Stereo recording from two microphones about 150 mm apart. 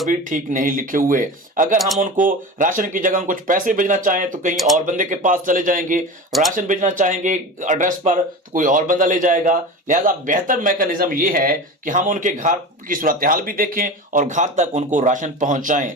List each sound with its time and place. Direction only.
0.1 s speech: 60° right (ahead or behind)
4.5 s speech: centre (ahead or behind)
4.9 s speech: 60° right (ahead or behind)